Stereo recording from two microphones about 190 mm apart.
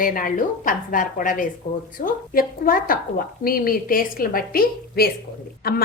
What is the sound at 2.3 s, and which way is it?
A woman's voice, 50° left (ahead or behind).